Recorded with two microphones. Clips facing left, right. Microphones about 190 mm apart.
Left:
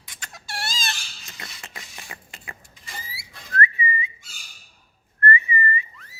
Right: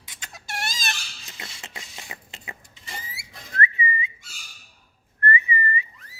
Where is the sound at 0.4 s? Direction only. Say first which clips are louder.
Even; 20° right (ahead or behind).